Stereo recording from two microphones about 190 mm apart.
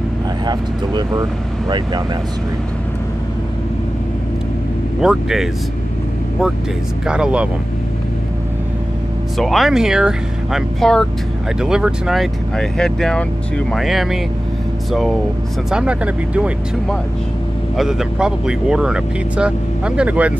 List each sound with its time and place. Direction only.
0.5 s speech: 20° right (ahead or behind)
5.0 s speech: centre (ahead or behind)
7.1 s speech: 5° right (ahead or behind)
9.4 s speech: centre (ahead or behind)
17.7 s speech: 5° right (ahead or behind)